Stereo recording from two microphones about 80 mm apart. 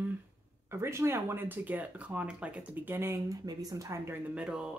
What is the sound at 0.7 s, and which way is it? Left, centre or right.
Speech, right.